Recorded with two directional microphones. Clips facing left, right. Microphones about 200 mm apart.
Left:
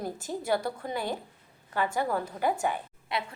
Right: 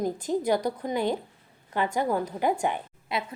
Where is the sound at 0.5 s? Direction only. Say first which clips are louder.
Right 4 dB; 20° right (ahead or behind).